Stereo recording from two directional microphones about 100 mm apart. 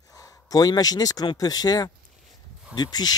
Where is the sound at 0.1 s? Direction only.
40° left (ahead or behind).